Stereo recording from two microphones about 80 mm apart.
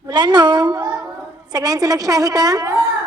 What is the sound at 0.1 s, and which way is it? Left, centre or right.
A woman's voice, right.